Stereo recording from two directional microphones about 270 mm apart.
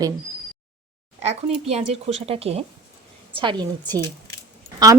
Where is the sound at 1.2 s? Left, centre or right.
Right.